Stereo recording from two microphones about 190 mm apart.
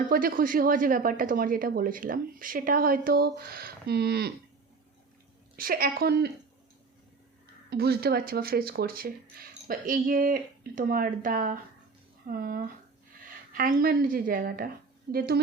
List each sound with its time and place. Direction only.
0.1 s a woman's voice: 50° right (ahead or behind)
5.5 s a woman's voice: 50° right (ahead or behind)
7.7 s a woman's voice: 55° right (ahead or behind)